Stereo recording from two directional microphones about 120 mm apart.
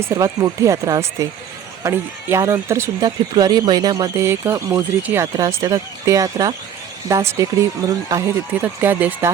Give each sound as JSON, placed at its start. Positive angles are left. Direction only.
{"t": 0.0, "sound": "speech", "side_deg": -30}
{"t": 3.3, "sound": "speech", "side_deg": -35}
{"t": 8.6, "sound": "speech", "side_deg": -15}